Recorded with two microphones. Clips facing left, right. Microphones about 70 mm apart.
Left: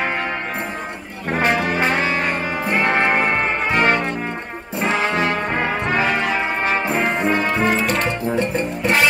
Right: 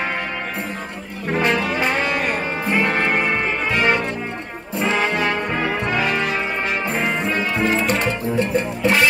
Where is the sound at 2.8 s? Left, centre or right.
Left.